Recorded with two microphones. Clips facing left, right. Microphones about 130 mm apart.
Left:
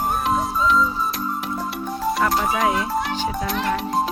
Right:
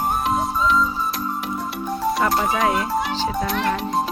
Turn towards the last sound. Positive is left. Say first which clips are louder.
# right 1 dB
turn(degrees=0)  # may be behind; listen again after turning